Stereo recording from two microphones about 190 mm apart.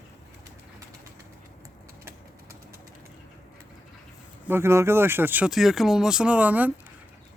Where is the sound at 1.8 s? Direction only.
50° right (ahead or behind).